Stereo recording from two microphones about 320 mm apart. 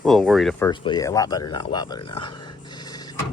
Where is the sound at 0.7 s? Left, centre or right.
Centre.